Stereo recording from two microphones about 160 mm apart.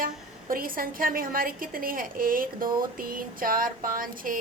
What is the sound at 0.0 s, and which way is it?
A woman's voice, 60° right (ahead or behind).